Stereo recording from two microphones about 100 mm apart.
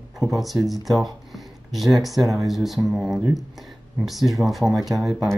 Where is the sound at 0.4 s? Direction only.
Centre (ahead or behind).